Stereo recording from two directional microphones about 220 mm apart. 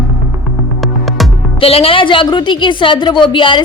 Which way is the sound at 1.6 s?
25° left (ahead or behind).